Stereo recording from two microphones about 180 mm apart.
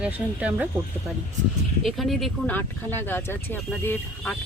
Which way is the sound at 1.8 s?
Centre (ahead or behind).